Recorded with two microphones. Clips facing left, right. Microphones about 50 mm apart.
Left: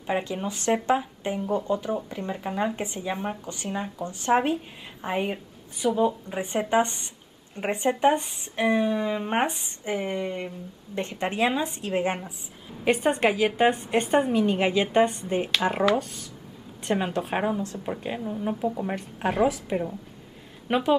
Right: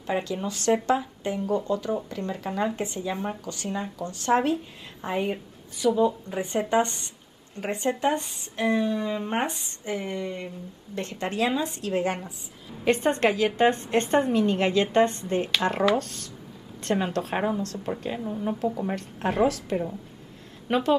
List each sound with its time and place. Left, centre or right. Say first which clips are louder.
0.0 s speech: even; centre
12.8 s a woman's voice: even; centre